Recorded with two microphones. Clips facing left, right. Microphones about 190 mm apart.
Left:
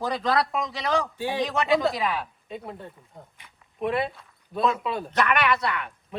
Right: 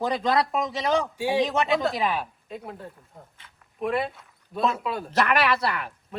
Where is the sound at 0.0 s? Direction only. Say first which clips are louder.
Right 1 dB; 20° right (ahead or behind).